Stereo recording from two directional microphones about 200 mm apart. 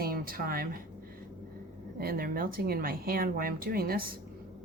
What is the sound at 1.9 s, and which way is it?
Speech, 50° right (ahead or behind).